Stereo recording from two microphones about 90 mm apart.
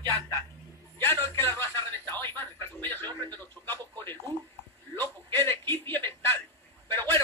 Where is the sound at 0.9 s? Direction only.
25° left (ahead or behind).